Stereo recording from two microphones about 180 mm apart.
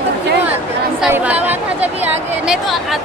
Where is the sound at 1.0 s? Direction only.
10° right (ahead or behind).